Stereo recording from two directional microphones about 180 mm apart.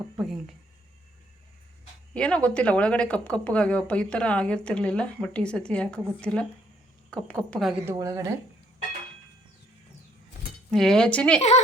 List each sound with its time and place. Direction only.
0.2 s a woman's voice: centre (ahead or behind)
2.1 s a woman's voice: 5° left (ahead or behind)
7.9 s speech: 20° right (ahead or behind)
10.7 s a woman's voice: 5° left (ahead or behind)